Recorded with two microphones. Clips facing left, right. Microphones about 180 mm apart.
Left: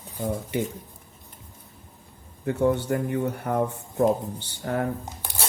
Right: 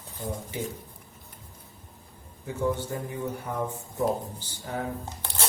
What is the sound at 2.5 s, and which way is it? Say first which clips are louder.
Speech: left 6 dB; 65° left (ahead or behind).